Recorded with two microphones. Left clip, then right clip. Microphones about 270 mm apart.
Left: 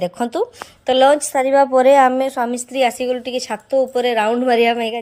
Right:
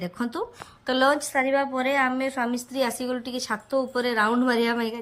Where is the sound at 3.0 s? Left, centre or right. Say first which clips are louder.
Left 9 dB; right.